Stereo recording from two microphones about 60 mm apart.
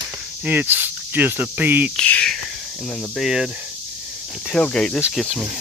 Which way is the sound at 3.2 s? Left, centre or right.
Centre.